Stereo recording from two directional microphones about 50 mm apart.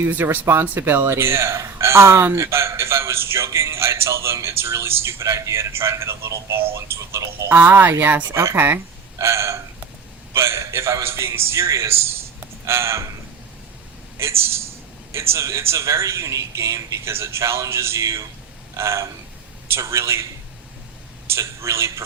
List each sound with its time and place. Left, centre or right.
0.1 s speech: right
1.1 s speech: right
7.5 s speech: right
9.1 s speech: right
10.3 s speech: right
14.2 s a man's voice: right
18.8 s a man's voice: right
21.3 s speech: right